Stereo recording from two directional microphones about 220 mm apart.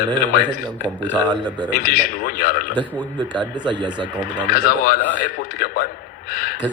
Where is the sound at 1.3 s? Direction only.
20° right (ahead or behind).